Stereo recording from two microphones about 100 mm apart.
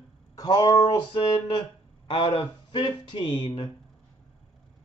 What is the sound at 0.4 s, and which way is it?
A man's voice, 40° left (ahead or behind).